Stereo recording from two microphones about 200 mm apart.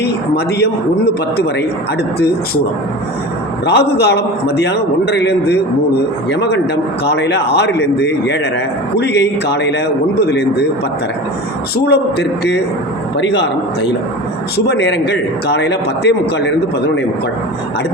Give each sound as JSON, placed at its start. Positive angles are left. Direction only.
{"t": 0.0, "sound": "speech", "side_deg": 55}
{"t": 3.7, "sound": "a man's voice", "side_deg": 55}
{"t": 11.9, "sound": "a man's voice", "side_deg": 55}
{"t": 14.5, "sound": "a man's voice", "side_deg": 55}